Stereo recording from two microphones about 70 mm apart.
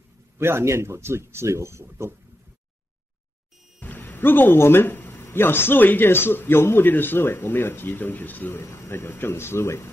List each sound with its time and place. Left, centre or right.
0.4 s speech: right
3.8 s speech: left